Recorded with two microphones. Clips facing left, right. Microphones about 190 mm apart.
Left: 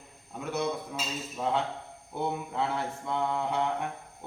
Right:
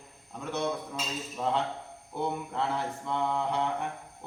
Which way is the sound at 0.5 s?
5° left (ahead or behind).